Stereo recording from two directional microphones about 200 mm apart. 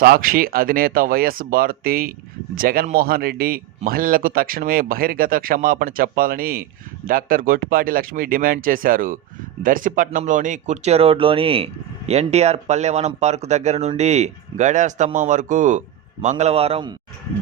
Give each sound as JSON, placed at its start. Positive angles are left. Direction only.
{"t": 0.0, "sound": "a man's voice", "side_deg": -45}